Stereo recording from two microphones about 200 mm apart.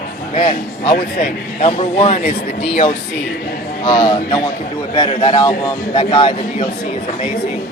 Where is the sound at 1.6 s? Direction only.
30° left (ahead or behind).